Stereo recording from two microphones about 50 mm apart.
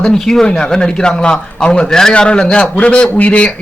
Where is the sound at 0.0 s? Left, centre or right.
Centre.